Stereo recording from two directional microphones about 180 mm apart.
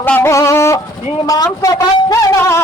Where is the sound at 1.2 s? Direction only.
20° left (ahead or behind).